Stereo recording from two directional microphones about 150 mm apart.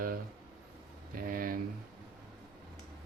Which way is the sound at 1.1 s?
75° right (ahead or behind).